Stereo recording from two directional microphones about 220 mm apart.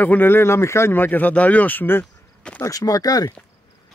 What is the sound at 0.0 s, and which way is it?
Speech, 10° left (ahead or behind).